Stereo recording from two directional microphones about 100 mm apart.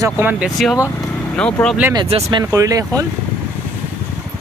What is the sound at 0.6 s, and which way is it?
Speech, centre (ahead or behind).